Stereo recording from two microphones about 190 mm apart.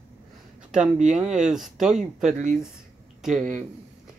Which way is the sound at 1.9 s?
40° right (ahead or behind).